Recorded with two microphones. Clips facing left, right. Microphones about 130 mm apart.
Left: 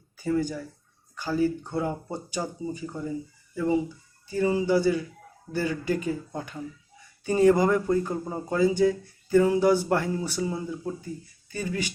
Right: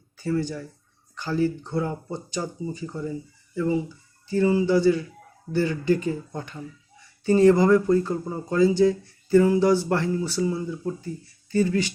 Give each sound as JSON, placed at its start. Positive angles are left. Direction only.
{"t": 0.2, "sound": "speech", "side_deg": 10}
{"t": 4.3, "sound": "speech", "side_deg": 15}